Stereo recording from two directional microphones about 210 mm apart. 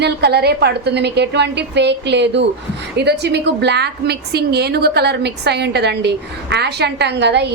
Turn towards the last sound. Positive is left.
turn(degrees=-55)  # may be behind; listen again after turning